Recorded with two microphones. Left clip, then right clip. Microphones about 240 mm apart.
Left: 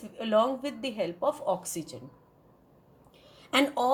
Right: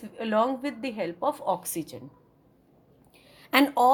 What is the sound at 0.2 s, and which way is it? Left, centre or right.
Speech, right.